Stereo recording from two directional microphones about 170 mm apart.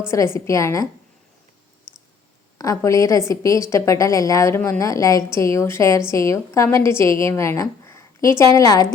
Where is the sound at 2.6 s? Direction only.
20° left (ahead or behind).